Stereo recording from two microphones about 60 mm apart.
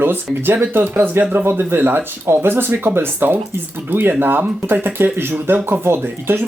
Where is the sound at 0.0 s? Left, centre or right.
Right.